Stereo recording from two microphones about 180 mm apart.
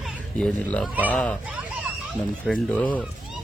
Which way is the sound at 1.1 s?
5° left (ahead or behind).